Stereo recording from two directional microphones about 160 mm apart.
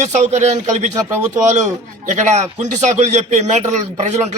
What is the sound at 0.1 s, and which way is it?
A man's voice, 50° right (ahead or behind).